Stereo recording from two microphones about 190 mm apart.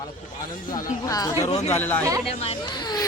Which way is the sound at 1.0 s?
20° left (ahead or behind).